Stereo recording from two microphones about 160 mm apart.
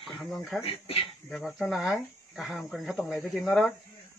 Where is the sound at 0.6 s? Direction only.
35° left (ahead or behind).